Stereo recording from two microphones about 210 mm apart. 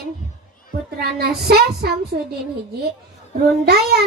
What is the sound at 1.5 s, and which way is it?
Speech, 50° right (ahead or behind).